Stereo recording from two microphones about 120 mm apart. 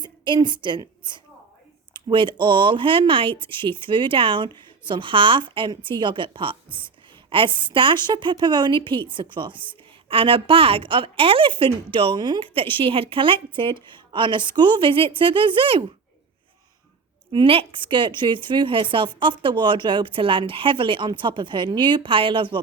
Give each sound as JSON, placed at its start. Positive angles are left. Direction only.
{"t": 0.0, "sound": "a woman's voice", "side_deg": -40}
{"t": 17.3, "sound": "a woman's voice", "side_deg": -50}